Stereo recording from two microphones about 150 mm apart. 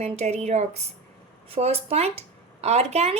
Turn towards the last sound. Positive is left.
turn(degrees=-45)  # may be behind; listen again after turning